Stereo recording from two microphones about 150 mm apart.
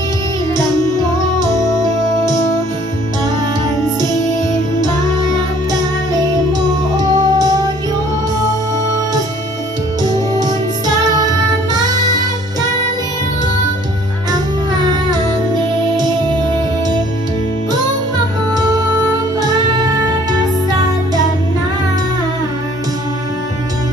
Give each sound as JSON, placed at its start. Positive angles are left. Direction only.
{"t": 7.0, "sound": "music", "side_deg": -25}
{"t": 19.4, "sound": "music", "side_deg": -25}